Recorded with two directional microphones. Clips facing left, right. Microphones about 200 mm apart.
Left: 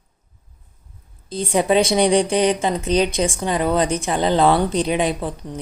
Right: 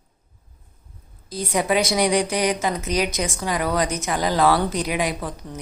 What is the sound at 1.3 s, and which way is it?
Speech, 30° left (ahead or behind).